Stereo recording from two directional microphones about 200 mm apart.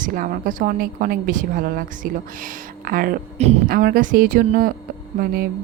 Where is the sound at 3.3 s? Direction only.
30° right (ahead or behind).